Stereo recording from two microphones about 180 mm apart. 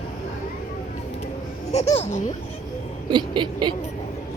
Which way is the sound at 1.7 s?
35° left (ahead or behind).